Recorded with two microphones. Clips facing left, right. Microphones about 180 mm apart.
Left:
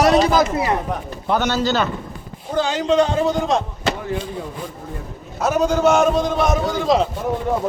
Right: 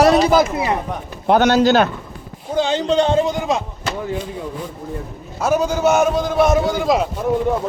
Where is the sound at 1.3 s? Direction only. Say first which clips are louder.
Right 6 dB; 65° right (ahead or behind).